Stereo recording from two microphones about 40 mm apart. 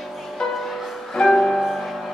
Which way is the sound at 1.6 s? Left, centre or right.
Centre.